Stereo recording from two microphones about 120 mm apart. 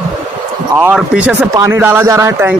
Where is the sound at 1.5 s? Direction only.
25° right (ahead or behind).